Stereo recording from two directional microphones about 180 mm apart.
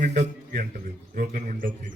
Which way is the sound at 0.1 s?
70° right (ahead or behind).